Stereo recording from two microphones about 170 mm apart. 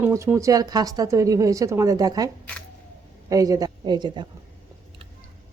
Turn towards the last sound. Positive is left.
turn(degrees=-25)  # may be behind; listen again after turning